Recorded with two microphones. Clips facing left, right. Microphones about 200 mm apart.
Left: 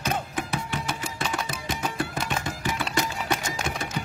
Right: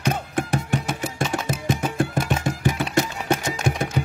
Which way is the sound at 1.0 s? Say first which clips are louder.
Right 5 dB; 50° right (ahead or behind).